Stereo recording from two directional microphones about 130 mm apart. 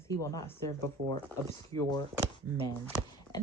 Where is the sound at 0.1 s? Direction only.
25° left (ahead or behind).